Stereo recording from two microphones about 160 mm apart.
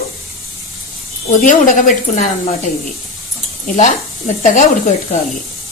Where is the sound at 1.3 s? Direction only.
55° left (ahead or behind).